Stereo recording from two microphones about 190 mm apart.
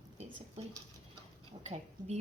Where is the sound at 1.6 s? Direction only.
35° right (ahead or behind).